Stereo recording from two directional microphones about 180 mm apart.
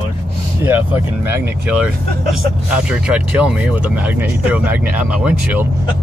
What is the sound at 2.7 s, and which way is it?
Speech, 5° right (ahead or behind).